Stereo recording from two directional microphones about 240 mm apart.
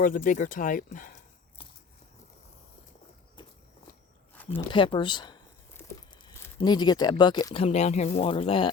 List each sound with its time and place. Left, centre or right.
0.0 s speech: left
3.4 s walk: centre
4.5 s speech: left